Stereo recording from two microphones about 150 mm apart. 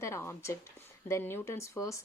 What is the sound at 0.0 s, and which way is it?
Speech, 15° left (ahead or behind).